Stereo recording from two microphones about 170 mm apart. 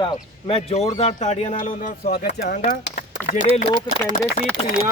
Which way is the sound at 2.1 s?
60° left (ahead or behind).